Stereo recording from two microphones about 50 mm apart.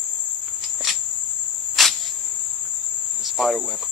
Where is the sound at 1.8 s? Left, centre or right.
Centre.